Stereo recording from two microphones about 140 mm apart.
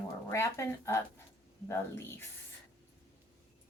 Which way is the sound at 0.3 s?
20° left (ahead or behind).